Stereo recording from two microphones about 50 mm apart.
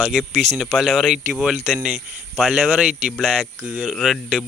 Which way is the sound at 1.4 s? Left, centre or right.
Centre.